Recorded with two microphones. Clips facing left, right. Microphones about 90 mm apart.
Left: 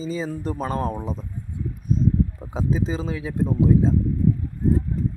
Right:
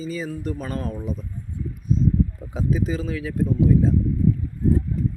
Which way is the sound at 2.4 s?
30° left (ahead or behind).